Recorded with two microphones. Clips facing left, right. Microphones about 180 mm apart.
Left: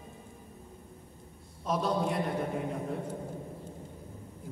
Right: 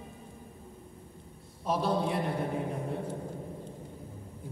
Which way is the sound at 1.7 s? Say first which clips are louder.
Right 1 dB; 30° right (ahead or behind).